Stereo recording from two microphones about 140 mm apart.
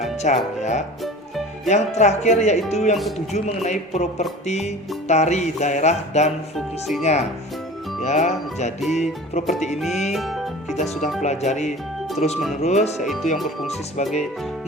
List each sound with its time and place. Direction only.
0.0 s speech: 55° left (ahead or behind)
2.6 s music: 50° left (ahead or behind)
8.9 s speech: 55° left (ahead or behind)
10.1 s music: centre (ahead or behind)
10.8 s speech: 55° left (ahead or behind)
12.6 s music: 50° left (ahead or behind)
13.7 s speech: 55° left (ahead or behind)